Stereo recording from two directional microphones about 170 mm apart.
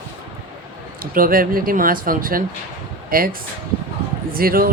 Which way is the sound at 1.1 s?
55° right (ahead or behind).